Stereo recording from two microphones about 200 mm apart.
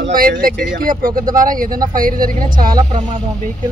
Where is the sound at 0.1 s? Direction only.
45° right (ahead or behind).